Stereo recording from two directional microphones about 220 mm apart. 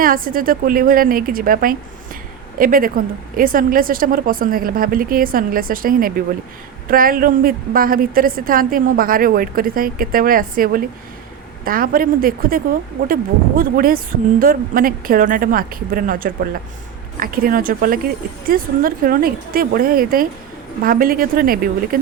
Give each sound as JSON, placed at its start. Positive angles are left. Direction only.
{"t": 0.0, "sound": "a woman's voice", "side_deg": -40}